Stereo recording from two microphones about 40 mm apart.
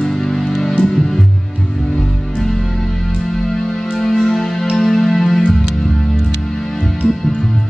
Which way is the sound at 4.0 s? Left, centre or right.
Centre.